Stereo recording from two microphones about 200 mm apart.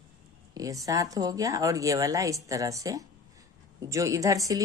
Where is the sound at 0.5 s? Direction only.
15° right (ahead or behind).